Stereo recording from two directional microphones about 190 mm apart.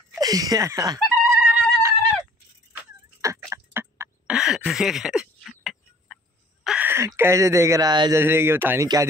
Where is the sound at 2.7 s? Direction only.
15° right (ahead or behind); by 6.1 s centre (ahead or behind).